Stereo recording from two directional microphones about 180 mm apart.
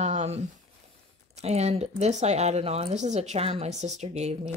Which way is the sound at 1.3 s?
35° right (ahead or behind).